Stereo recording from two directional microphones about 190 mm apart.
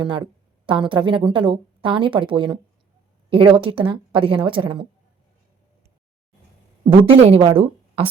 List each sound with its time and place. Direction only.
0.0 s a woman's voice: 25° right (ahead or behind)
7.1 s a woman's voice: 30° right (ahead or behind)